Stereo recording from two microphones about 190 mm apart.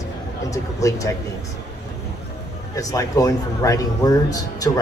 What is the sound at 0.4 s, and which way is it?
Speech, 15° left (ahead or behind).